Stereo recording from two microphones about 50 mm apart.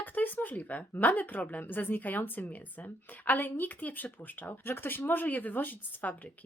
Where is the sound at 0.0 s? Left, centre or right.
Left.